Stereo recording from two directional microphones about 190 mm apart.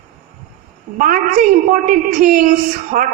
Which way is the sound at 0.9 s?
45° right (ahead or behind).